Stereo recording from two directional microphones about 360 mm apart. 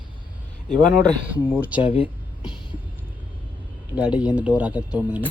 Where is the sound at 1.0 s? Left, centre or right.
Centre.